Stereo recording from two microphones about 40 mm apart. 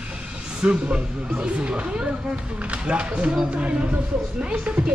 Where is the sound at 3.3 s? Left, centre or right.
Right.